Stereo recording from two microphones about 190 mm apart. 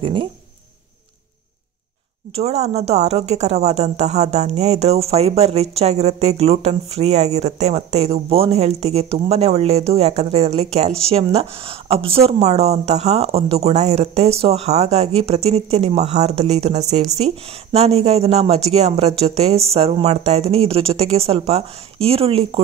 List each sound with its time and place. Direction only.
0.0 s speech: 30° right (ahead or behind)
2.3 s speech: 35° right (ahead or behind)